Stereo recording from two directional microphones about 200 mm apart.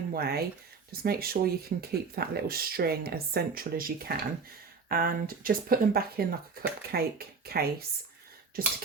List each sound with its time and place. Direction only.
0.1 s speech: 50° right (ahead or behind)